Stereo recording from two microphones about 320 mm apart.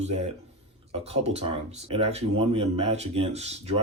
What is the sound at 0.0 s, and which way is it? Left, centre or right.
Speech, centre.